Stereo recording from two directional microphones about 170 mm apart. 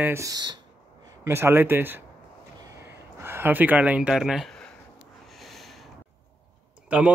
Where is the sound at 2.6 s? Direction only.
15° right (ahead or behind); by 5.9 s centre (ahead or behind).